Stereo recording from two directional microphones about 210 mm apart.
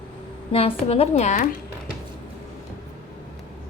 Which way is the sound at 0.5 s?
30° left (ahead or behind).